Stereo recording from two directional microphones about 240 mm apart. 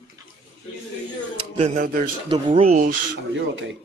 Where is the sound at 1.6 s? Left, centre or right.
Right.